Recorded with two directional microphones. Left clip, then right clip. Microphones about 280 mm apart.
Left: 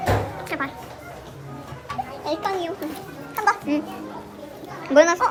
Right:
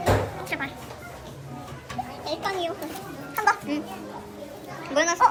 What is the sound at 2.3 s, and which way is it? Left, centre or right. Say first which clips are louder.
Speech: left 3 dB; centre.